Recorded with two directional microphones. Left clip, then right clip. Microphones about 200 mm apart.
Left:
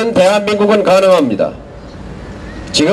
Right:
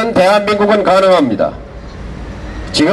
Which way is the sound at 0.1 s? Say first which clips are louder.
Right 1 dB; 40° left (ahead or behind).